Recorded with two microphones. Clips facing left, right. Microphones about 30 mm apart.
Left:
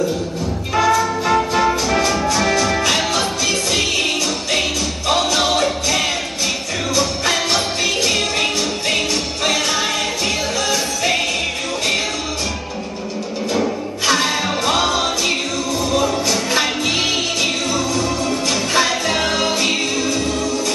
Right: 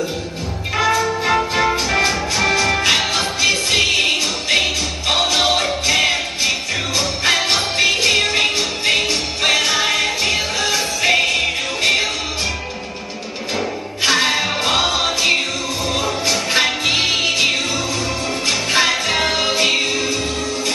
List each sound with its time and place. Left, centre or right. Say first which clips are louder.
0.7 s music: left 1 dB; centre
13.6 s music: right 1 dB; centre